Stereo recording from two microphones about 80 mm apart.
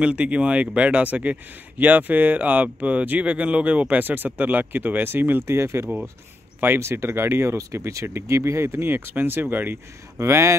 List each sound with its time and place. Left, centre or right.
0.0 s speech: centre; by 10.5 s right